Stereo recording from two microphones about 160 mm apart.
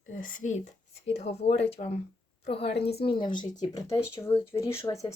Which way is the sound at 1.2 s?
40° left (ahead or behind).